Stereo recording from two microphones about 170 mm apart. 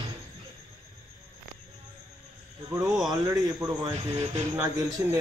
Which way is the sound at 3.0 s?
20° right (ahead or behind).